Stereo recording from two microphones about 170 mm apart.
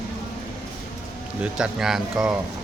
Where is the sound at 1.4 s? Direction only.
5° right (ahead or behind).